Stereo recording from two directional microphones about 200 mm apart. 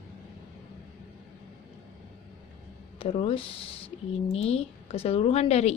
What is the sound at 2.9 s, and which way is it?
A woman's voice, 30° left (ahead or behind).